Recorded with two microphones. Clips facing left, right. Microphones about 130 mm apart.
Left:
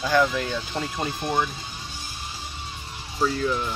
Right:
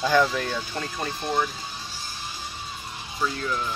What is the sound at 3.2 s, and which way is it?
Speech, 25° left (ahead or behind).